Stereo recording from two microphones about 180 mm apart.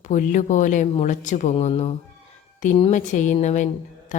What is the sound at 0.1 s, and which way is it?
Speech, 45° left (ahead or behind).